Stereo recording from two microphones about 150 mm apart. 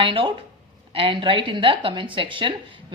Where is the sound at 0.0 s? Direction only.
35° right (ahead or behind).